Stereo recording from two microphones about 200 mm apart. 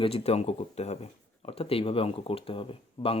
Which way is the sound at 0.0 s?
30° left (ahead or behind).